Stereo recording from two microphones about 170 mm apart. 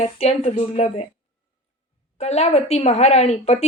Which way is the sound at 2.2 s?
40° left (ahead or behind).